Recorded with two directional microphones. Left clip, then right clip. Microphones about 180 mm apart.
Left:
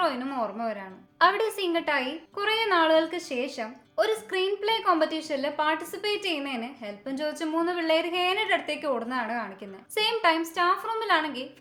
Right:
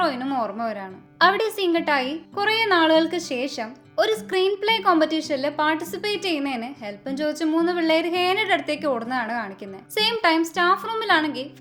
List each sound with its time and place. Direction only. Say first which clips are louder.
0.0 s a woman's voice: right 4 dB; 40° right (ahead or behind)